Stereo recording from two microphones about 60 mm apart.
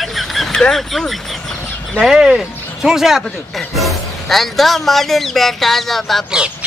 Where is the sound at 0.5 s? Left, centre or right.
Centre.